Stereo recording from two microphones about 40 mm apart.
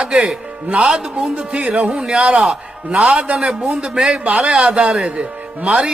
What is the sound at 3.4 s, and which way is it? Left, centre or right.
Speech, centre.